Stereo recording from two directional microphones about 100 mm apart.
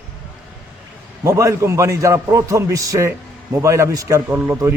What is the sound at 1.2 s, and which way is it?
A man's voice, 30° right (ahead or behind).